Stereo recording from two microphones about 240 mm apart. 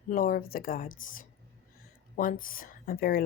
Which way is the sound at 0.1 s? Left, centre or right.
Left.